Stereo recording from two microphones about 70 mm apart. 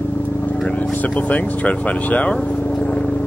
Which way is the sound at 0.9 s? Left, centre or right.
Left.